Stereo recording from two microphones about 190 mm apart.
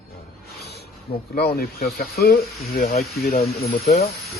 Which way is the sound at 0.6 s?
60° left (ahead or behind).